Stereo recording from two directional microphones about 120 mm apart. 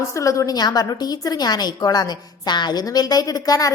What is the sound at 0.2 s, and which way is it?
A woman's voice, 25° left (ahead or behind).